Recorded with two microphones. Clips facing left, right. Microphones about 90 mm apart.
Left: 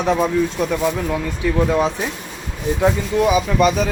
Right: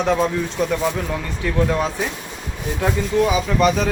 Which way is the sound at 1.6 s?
15° left (ahead or behind).